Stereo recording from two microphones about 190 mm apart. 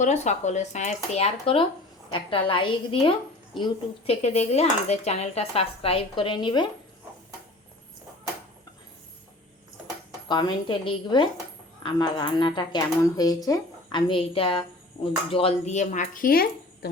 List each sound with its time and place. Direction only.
0.0 s a woman's voice: 35° left (ahead or behind)
10.2 s a woman's voice: 20° left (ahead or behind); by 16.9 s 50° left (ahead or behind)